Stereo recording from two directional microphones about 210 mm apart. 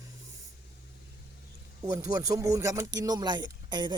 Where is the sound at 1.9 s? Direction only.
15° right (ahead or behind).